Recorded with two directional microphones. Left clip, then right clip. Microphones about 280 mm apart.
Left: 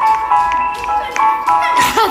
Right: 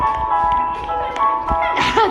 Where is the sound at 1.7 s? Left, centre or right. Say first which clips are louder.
Left 3 dB; centre.